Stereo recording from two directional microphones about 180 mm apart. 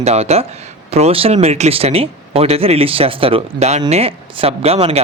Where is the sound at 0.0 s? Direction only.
35° right (ahead or behind).